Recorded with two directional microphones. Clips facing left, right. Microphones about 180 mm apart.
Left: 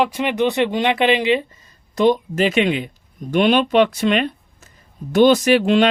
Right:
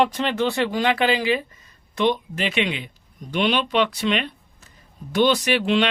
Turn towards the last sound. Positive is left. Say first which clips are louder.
# left 6 dB
turn(degrees=45)  # may be behind; listen again after turning